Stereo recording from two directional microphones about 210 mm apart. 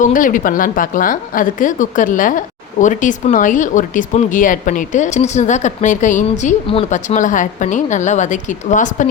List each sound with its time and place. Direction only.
0.0 s a woman's voice: 40° left (ahead or behind)